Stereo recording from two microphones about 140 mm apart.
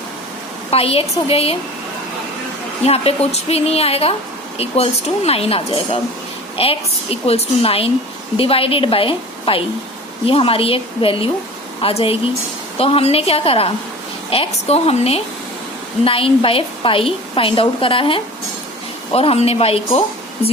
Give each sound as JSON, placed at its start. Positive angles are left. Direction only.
{"t": 0.7, "sound": "speech", "side_deg": 45}
{"t": 2.8, "sound": "a woman's voice", "side_deg": 45}